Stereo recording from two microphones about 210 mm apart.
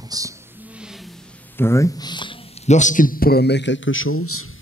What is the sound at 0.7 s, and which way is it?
Music, centre (ahead or behind).